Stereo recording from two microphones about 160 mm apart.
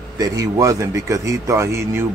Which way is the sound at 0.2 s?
20° right (ahead or behind).